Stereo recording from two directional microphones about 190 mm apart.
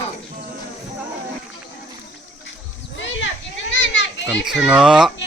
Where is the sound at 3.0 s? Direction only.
70° left (ahead or behind).